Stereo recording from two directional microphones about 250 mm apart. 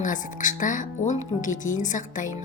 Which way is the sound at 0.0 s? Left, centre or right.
Left.